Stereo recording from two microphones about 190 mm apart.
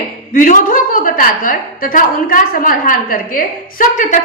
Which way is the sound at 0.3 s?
45° left (ahead or behind).